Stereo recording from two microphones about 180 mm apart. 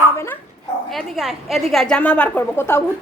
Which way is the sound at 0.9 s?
Centre (ahead or behind).